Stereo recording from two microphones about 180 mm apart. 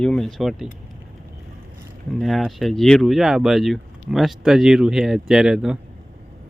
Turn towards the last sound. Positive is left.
turn(degrees=-5)  # may be behind; listen again after turning